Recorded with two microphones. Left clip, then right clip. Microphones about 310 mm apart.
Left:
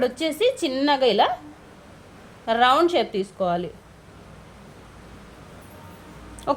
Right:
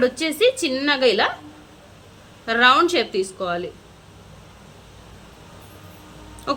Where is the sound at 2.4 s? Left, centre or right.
Left.